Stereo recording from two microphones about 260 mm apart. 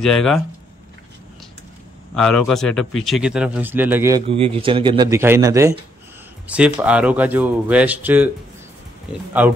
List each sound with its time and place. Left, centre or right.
0.0 s speech: centre
2.1 s speech: centre
4.3 s speech: right
9.4 s speech: centre